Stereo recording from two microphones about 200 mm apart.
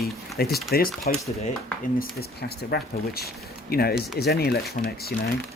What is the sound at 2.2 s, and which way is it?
Speech, 50° left (ahead or behind).